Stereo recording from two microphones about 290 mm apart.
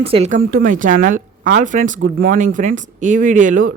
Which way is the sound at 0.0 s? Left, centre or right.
Right.